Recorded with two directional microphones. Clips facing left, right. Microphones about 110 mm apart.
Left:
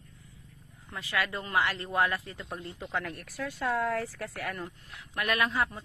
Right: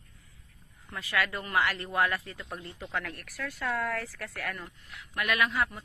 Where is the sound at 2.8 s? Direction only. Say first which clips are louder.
Left 1 dB; 15° left (ahead or behind).